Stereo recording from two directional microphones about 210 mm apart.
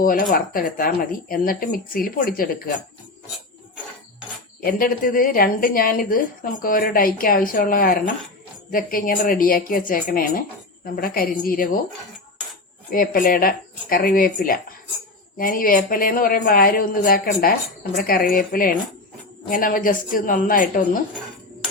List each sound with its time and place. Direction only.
0.0 s a woman's voice: 40° left (ahead or behind)
4.6 s a woman's voice: 45° left (ahead or behind)
12.9 s a woman's voice: 40° left (ahead or behind)